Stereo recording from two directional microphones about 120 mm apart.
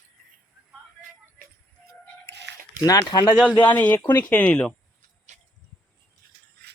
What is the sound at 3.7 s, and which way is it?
Speech, 15° left (ahead or behind).